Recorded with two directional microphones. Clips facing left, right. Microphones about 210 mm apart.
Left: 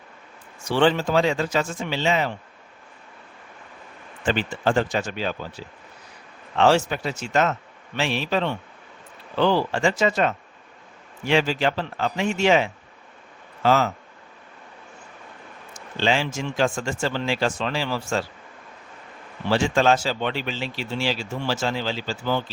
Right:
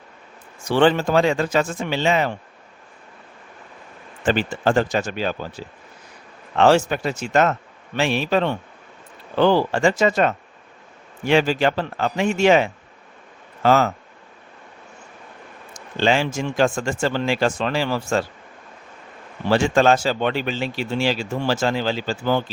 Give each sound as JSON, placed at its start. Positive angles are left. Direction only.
{"t": 0.7, "sound": "speech", "side_deg": -55}
{"t": 4.3, "sound": "speech", "side_deg": -40}
{"t": 16.0, "sound": "speech", "side_deg": -50}
{"t": 19.5, "sound": "speech", "side_deg": -50}